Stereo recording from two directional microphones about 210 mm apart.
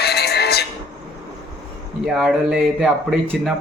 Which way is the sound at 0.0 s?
50° left (ahead or behind).